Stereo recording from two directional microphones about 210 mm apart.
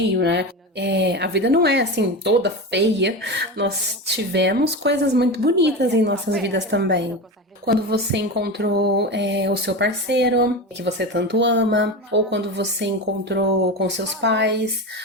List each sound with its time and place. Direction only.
0.1 s speech: 55° right (ahead or behind)